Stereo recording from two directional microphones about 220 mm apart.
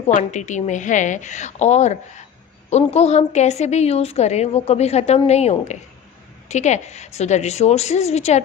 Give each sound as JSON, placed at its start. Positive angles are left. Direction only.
{"t": 0.2, "sound": "a woman's voice", "side_deg": 35}